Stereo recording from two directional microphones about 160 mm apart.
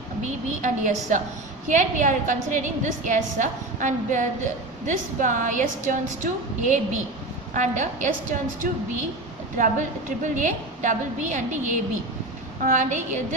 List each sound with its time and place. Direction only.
0.2 s a woman's voice: 50° right (ahead or behind)
9.6 s a woman's voice: 55° right (ahead or behind)
12.6 s a woman's voice: 50° right (ahead or behind)